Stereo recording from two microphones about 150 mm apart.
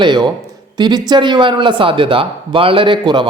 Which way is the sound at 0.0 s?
30° right (ahead or behind).